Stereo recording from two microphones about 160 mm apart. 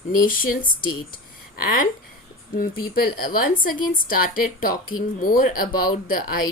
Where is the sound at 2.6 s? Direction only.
65° left (ahead or behind).